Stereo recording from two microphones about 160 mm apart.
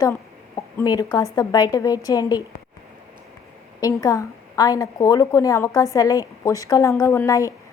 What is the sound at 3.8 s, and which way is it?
A woman's voice, 20° left (ahead or behind).